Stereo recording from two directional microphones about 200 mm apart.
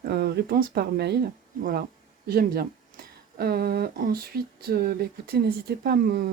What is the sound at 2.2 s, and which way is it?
Speech, 50° right (ahead or behind).